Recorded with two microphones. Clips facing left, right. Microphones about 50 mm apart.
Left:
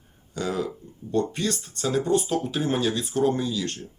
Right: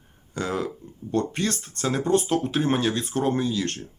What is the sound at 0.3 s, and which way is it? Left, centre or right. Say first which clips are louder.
Speech: even; right.